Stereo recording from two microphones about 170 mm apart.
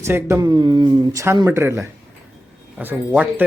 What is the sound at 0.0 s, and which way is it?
A man's voice, 15° right (ahead or behind).